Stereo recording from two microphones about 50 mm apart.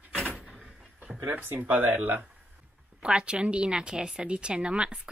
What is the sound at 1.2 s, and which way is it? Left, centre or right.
Speech, right.